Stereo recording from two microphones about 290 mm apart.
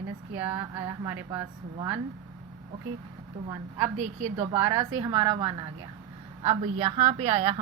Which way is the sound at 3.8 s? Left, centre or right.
Right.